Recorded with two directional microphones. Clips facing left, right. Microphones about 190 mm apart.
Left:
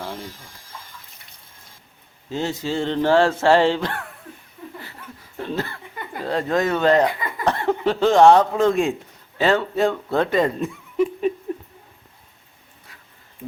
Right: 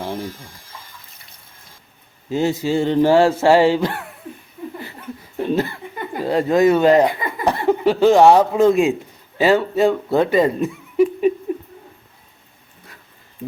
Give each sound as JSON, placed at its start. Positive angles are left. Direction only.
{"t": 2.3, "sound": "speech", "side_deg": -10}
{"t": 4.8, "sound": "laughter", "side_deg": -15}
{"t": 6.1, "sound": "speech", "side_deg": -10}